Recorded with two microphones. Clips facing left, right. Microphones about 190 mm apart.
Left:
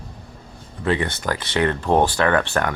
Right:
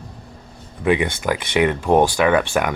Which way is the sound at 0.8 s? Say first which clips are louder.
Right 3 dB; 15° right (ahead or behind).